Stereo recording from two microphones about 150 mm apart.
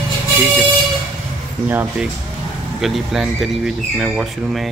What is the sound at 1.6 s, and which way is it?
Speech, 10° right (ahead or behind).